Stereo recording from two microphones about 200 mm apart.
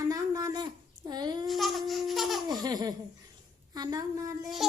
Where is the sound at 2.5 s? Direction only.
20° right (ahead or behind).